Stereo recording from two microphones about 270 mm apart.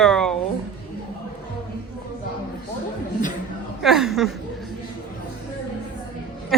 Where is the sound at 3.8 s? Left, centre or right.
Centre.